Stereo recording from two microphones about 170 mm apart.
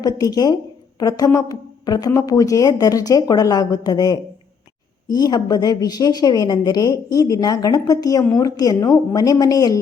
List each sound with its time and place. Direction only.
0.0 s a woman's voice: 25° left (ahead or behind)